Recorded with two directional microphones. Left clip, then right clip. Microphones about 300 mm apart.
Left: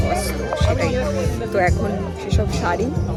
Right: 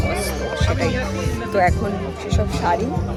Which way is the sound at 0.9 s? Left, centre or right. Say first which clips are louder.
Left 3 dB; left.